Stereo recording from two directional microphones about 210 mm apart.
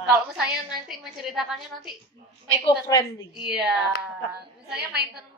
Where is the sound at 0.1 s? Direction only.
5° right (ahead or behind).